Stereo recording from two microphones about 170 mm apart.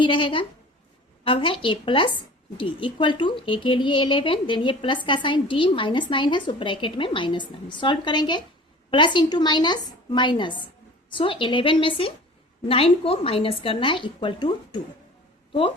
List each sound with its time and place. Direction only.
0.0 s a woman's voice: 30° left (ahead or behind)